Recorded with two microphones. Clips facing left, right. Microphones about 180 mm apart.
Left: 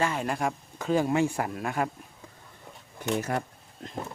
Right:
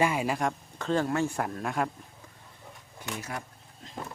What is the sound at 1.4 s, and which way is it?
Speech, 5° left (ahead or behind).